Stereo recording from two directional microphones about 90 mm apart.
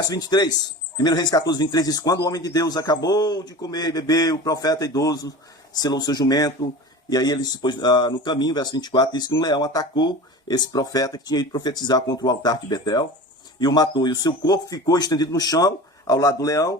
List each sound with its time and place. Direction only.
0.0 s speech: 45° left (ahead or behind)